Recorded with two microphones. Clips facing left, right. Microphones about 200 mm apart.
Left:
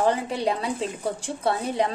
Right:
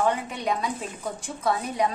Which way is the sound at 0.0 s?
30° left (ahead or behind).